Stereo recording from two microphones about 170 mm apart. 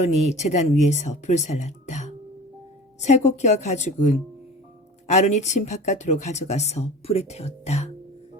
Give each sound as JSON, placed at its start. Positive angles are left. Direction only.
{"t": 0.0, "sound": "speech", "side_deg": 40}